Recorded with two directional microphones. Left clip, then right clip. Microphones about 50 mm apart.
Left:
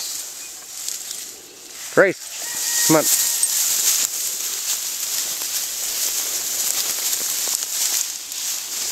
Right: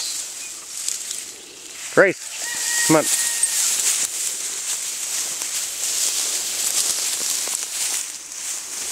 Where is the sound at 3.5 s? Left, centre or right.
Centre.